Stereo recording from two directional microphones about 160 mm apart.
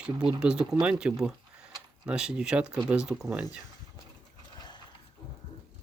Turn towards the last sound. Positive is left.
turn(degrees=25)  # may be behind; listen again after turning